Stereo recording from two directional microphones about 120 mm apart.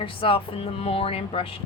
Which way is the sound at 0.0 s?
45° left (ahead or behind).